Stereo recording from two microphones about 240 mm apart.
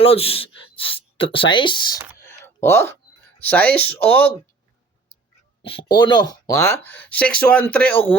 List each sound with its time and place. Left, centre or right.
0.0 s speech: left; by 4.3 s centre
5.6 s speech: centre